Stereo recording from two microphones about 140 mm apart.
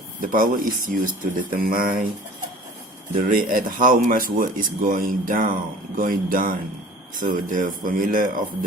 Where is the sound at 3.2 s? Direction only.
75° right (ahead or behind).